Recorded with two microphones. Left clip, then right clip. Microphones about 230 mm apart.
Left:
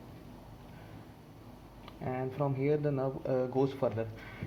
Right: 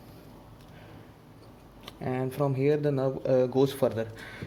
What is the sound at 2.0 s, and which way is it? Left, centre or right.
Speech, right.